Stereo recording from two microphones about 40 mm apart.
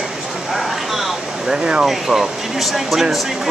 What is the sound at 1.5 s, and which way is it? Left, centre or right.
Speech, right.